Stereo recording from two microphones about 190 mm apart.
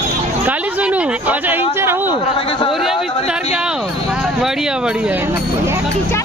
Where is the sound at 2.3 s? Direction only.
30° left (ahead or behind).